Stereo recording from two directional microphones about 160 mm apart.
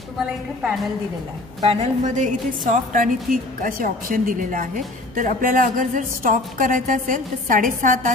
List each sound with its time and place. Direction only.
1.6 s a woman's voice: 40° right (ahead or behind)